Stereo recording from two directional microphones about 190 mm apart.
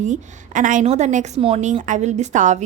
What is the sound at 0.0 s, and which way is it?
A woman's voice, 40° right (ahead or behind).